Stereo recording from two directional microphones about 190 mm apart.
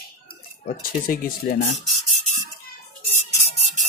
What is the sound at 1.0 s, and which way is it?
Speech, 50° left (ahead or behind).